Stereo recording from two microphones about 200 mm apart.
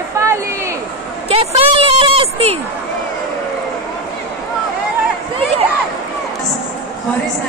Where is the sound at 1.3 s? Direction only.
30° right (ahead or behind).